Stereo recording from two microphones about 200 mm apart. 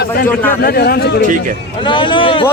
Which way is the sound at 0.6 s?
50° left (ahead or behind).